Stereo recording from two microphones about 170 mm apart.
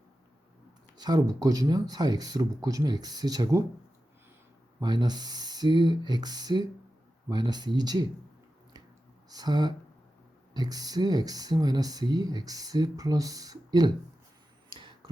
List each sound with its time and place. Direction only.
0.9 s speech: 25° right (ahead or behind)
4.8 s speech: 25° right (ahead or behind)
9.3 s speech: 25° right (ahead or behind)
14.7 s a sound: 30° right (ahead or behind)